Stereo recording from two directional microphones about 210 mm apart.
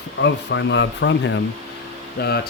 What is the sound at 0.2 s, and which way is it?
Speech, 60° left (ahead or behind).